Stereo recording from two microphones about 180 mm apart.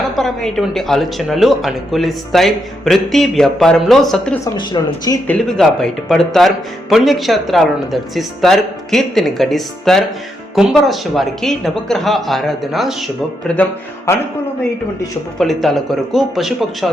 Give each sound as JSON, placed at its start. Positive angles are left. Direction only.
{"t": 0.2, "sound": "speech", "side_deg": 0}
{"t": 4.5, "sound": "speech", "side_deg": 25}
{"t": 5.3, "sound": "speech", "side_deg": 5}
{"t": 15.4, "sound": "speech", "side_deg": 0}